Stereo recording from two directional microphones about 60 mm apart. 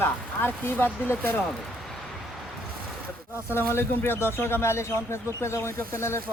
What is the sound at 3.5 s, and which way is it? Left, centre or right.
Speech, left.